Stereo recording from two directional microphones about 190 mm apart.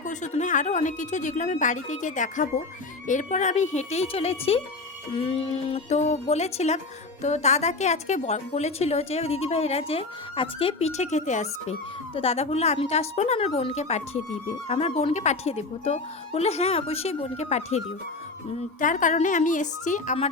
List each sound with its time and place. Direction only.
0.0 s speech: 40° left (ahead or behind)